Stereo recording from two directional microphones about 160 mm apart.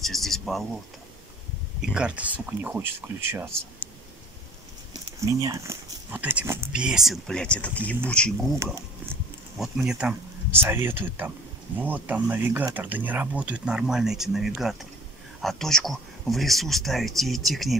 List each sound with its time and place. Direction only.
0.0 s speech: centre (ahead or behind)
1.8 s speech: 5° right (ahead or behind)
5.2 s speech: 20° right (ahead or behind)
6.7 s speech: 5° right (ahead or behind)
9.6 s speech: 5° right (ahead or behind)